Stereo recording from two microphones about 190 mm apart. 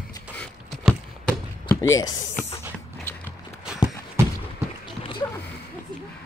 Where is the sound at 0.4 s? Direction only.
5° left (ahead or behind).